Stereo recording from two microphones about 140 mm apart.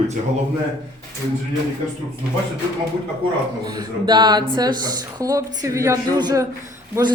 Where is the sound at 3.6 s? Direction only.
30° right (ahead or behind).